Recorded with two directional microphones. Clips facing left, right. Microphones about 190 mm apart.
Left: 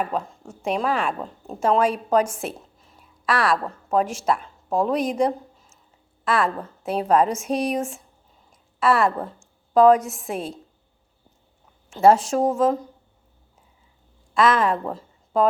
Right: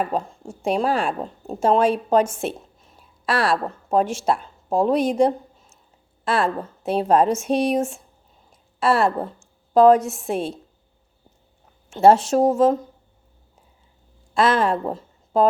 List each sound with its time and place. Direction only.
0.0 s a woman's voice: 30° right (ahead or behind)
11.9 s speech: 25° right (ahead or behind)
14.3 s a woman's voice: 30° right (ahead or behind)